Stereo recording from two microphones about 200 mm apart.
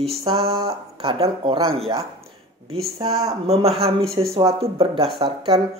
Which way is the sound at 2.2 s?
30° right (ahead or behind).